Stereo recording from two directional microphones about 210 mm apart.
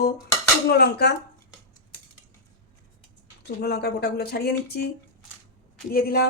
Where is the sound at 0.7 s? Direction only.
50° left (ahead or behind).